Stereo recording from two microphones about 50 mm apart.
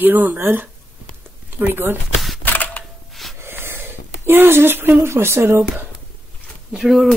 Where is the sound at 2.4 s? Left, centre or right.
Left.